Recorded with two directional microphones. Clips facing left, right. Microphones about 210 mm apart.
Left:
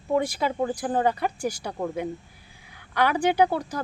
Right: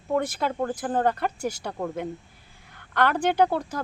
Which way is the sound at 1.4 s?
25° right (ahead or behind).